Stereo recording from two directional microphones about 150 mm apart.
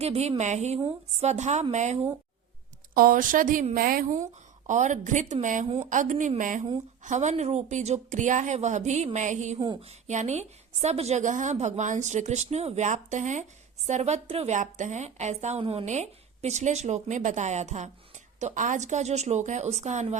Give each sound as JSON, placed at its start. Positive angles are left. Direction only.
{"t": 0.0, "sound": "a woman's voice", "side_deg": -45}
{"t": 2.9, "sound": "speech", "side_deg": -70}
{"t": 4.1, "sound": "speech", "side_deg": -55}
{"t": 5.6, "sound": "a woman's voice", "side_deg": -45}